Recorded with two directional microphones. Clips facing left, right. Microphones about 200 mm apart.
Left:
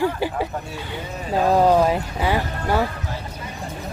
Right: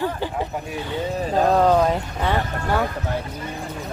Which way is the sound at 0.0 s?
10° left (ahead or behind).